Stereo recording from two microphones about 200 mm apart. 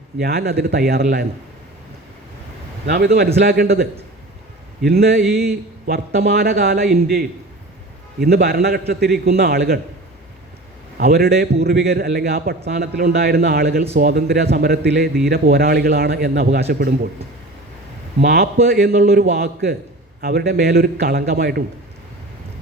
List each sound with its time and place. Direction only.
0.2 s a man's voice: 50° right (ahead or behind)
2.8 s a man's voice: 55° right (ahead or behind)
4.9 s a man's voice: 50° right (ahead or behind)
11.0 s a man's voice: 50° right (ahead or behind)
18.2 s a man's voice: 55° right (ahead or behind)
20.2 s a man's voice: 50° right (ahead or behind)